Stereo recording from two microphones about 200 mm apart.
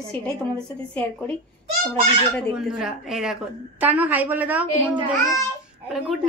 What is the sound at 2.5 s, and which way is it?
A woman's voice, 5° right (ahead or behind).